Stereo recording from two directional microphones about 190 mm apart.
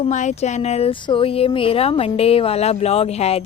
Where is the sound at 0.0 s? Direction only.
40° left (ahead or behind).